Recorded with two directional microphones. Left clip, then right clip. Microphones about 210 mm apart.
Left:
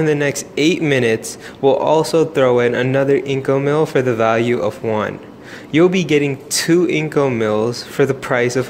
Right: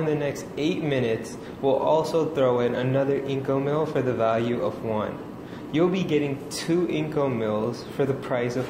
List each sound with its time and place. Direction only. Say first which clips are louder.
0.0 s a man's voice: left 9 dB; 55° left (ahead or behind)